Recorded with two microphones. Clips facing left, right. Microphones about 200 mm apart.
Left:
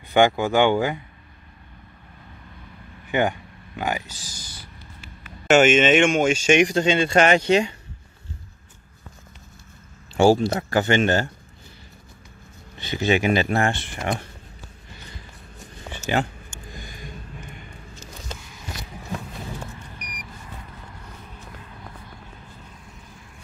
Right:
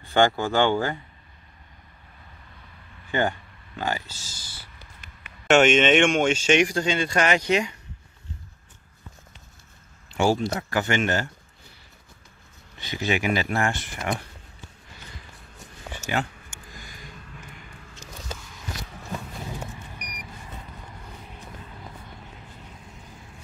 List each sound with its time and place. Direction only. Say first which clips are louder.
0.0 s speech: left 3 dB; 15° left (ahead or behind)
3.1 s a sound: left 3 dB; 15° left (ahead or behind)
5.5 s speech: left 2 dB; 5° left (ahead or behind); by 7.7 s 30° left (ahead or behind)
10.1 s speech: left 6 dB; 35° left (ahead or behind)
12.7 s speech: left 5 dB; 25° left (ahead or behind)
16.1 s speech: left 4 dB; 30° left (ahead or behind)
16.7 s a sound: left 6 dB; 25° left (ahead or behind)